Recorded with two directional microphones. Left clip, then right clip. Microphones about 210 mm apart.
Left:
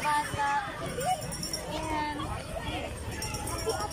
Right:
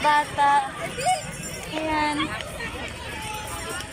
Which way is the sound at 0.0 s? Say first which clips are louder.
Right 9 dB; 30° right (ahead or behind).